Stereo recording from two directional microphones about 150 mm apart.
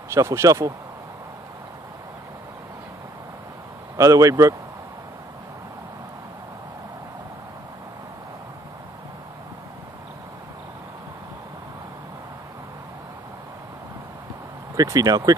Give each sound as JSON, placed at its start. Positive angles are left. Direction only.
{"t": 0.1, "sound": "speech", "side_deg": -20}
{"t": 3.9, "sound": "speech", "side_deg": -20}
{"t": 14.8, "sound": "speech", "side_deg": -25}